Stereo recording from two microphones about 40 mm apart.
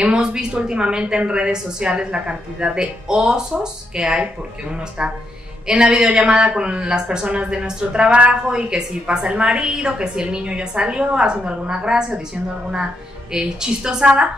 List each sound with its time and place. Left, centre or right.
0.0 s a woman's voice: right
5.7 s a woman's voice: centre
13.3 s a woman's voice: centre